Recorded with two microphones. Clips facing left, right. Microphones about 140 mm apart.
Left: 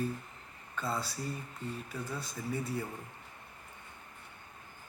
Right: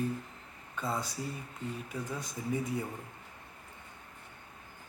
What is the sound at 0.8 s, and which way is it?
A man's voice, 15° right (ahead or behind).